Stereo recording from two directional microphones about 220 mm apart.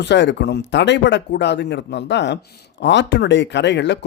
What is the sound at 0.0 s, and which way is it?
Speech, 50° left (ahead or behind).